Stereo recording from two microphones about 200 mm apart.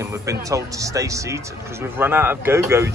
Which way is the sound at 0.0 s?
15° right (ahead or behind).